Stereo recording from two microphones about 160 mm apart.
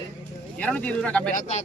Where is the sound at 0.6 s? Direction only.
10° left (ahead or behind).